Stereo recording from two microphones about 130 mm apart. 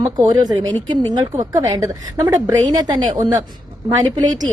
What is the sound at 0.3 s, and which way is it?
A woman's voice, 30° right (ahead or behind).